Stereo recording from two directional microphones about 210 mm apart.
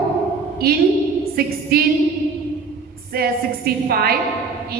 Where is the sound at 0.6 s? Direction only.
45° right (ahead or behind).